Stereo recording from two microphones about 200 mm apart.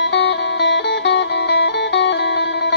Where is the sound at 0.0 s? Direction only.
60° left (ahead or behind).